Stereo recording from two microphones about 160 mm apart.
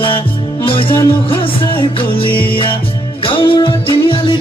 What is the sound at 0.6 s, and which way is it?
Music, 35° left (ahead or behind).